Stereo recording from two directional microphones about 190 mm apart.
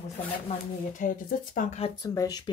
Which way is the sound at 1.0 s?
45° left (ahead or behind).